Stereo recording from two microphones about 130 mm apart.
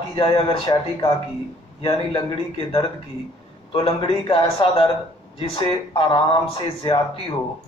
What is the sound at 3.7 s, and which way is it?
A man's voice, 40° left (ahead or behind).